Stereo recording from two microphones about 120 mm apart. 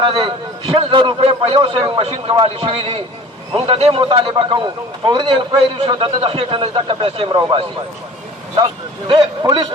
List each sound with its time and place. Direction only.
0.0 s a man's voice: 45° right (ahead or behind)
8.5 s a man's voice: 40° right (ahead or behind)